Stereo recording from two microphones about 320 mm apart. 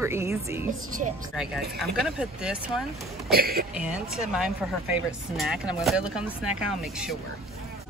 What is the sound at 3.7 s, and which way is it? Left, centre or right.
A woman's voice, centre.